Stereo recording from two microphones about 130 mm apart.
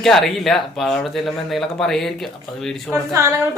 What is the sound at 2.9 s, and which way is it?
Speech, 20° right (ahead or behind).